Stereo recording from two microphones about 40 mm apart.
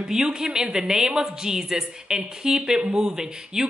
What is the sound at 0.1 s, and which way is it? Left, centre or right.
A woman's voice, centre.